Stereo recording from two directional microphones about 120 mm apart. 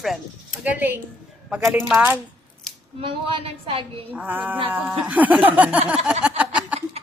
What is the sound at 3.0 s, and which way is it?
Speech, 45° right (ahead or behind).